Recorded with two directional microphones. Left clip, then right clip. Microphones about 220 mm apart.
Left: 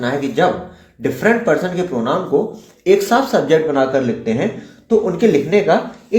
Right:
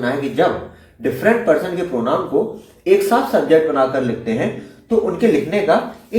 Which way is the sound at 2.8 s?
40° left (ahead or behind).